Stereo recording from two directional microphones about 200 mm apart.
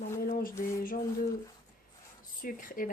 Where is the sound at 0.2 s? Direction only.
45° left (ahead or behind).